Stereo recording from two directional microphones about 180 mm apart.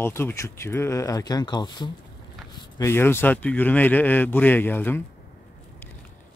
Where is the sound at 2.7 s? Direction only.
15° left (ahead or behind).